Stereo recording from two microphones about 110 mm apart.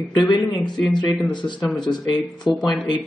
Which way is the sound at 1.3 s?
45° left (ahead or behind).